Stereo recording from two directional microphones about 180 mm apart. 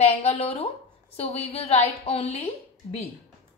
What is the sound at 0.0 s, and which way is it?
A woman's voice, 35° left (ahead or behind).